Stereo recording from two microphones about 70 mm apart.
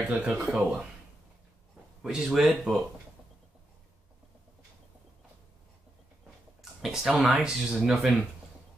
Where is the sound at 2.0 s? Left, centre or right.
Centre.